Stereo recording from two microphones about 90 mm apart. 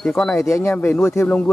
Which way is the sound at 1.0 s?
25° left (ahead or behind).